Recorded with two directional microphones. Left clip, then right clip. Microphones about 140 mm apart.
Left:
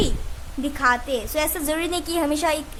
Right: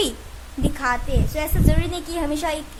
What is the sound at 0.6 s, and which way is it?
Speech, 15° left (ahead or behind).